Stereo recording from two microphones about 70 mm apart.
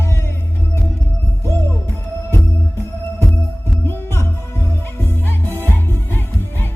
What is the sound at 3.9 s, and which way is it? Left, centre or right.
Music, left.